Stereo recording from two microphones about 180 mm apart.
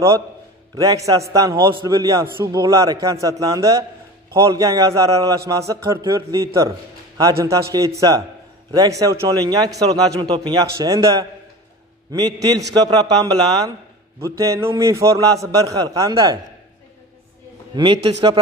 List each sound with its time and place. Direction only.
0.7 s a man's voice: 20° right (ahead or behind)
17.7 s a man's voice: 25° right (ahead or behind)